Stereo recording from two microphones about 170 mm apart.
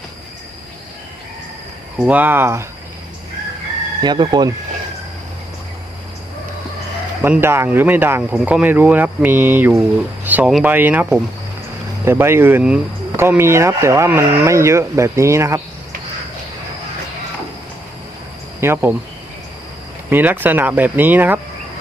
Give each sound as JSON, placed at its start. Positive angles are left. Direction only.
{"t": 2.0, "sound": "speech", "side_deg": -10}
{"t": 4.0, "sound": "speech", "side_deg": -25}
{"t": 7.2, "sound": "speech", "side_deg": -15}
{"t": 18.6, "sound": "speech", "side_deg": -15}
{"t": 20.1, "sound": "speech", "side_deg": -10}